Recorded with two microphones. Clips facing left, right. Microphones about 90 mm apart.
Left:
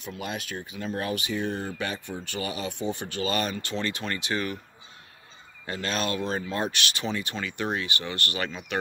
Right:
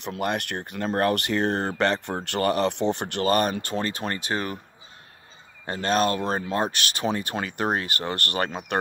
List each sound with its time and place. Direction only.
0.0 s speech: 65° right (ahead or behind); by 4.6 s 40° right (ahead or behind)
5.7 s speech: 40° right (ahead or behind)